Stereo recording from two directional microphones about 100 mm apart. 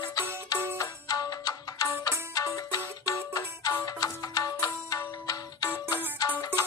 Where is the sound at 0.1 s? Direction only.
40° left (ahead or behind).